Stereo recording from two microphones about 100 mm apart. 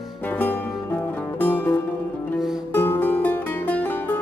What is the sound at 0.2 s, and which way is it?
Music, 20° left (ahead or behind).